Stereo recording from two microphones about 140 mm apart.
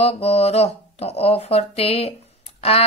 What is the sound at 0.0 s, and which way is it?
Speech, 50° left (ahead or behind).